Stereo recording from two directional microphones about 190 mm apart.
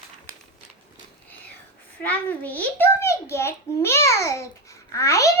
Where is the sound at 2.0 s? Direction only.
10° left (ahead or behind).